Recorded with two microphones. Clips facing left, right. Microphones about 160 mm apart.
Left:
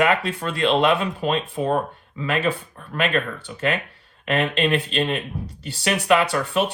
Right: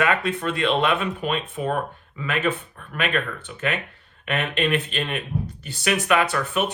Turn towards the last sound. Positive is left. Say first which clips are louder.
# left 2 dB
turn(degrees=30)  # may be behind; listen again after turning